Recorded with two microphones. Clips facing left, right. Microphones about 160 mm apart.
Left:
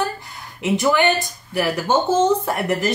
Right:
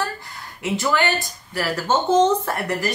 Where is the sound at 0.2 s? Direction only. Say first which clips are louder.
Left 2 dB; 20° left (ahead or behind).